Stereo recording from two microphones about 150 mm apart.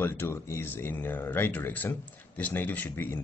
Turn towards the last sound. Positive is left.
turn(degrees=15)  # may be behind; listen again after turning